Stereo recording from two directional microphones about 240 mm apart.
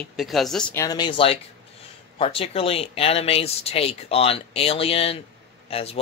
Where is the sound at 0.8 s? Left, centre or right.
Centre.